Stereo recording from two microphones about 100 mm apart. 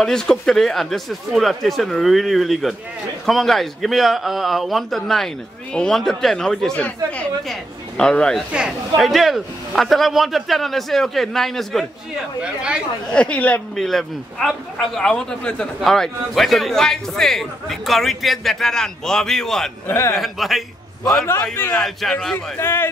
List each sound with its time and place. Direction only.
0.0 s a man's voice: 5° left (ahead or behind)
8.0 s speech: 5° left (ahead or behind)
8.5 s a man's voice: 10° right (ahead or behind)
12.4 s speech: 10° right (ahead or behind)
13.1 s speech: 10° left (ahead or behind)
13.7 s a man's voice: 5° left (ahead or behind)
19.9 s a man's voice: 30° left (ahead or behind)
20.2 s a man's voice: centre (ahead or behind)
22.6 s a man's voice: 25° left (ahead or behind)